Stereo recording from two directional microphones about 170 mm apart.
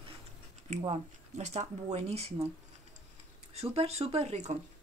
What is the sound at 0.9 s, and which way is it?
Speech, 40° right (ahead or behind).